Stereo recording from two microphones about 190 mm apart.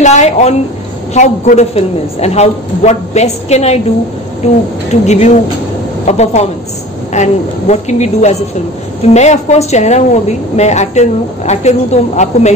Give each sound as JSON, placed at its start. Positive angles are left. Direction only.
{"t": 0.0, "sound": "a woman's voice", "side_deg": 35}